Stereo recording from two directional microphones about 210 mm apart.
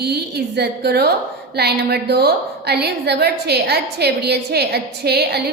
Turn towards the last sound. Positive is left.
turn(degrees=-50)  # may be behind; listen again after turning